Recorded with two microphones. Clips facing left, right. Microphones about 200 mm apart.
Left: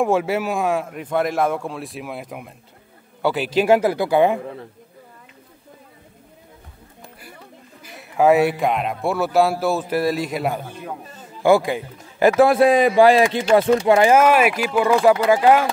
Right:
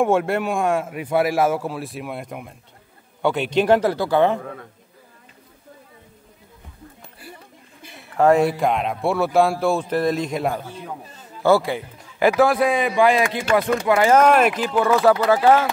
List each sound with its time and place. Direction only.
0.0 s a man's voice: centre (ahead or behind)
8.2 s a man's voice: 5° left (ahead or behind)
11.4 s speech: 15° left (ahead or behind)
12.7 s speech: 35° left (ahead or behind)
14.0 s speech: 5° left (ahead or behind)